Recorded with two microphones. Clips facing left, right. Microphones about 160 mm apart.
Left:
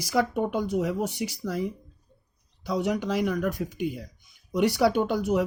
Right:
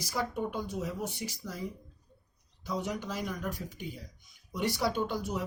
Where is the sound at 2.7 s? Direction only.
80° left.